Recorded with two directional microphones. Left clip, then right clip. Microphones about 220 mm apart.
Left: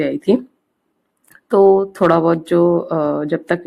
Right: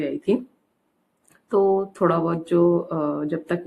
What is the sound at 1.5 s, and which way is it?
Speech, 40° left (ahead or behind).